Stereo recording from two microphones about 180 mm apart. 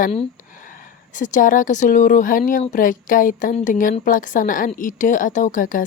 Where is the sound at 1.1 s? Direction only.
45° left (ahead or behind).